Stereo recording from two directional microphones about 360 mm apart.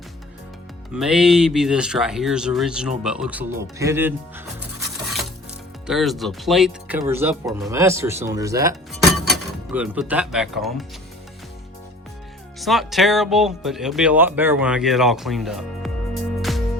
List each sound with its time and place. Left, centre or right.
0.9 s speech: centre
5.0 s music: centre
5.8 s speech: centre
12.5 s speech: centre